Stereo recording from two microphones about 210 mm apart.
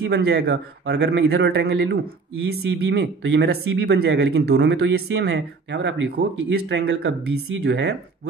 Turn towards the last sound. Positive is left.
turn(degrees=-55)  # may be behind; listen again after turning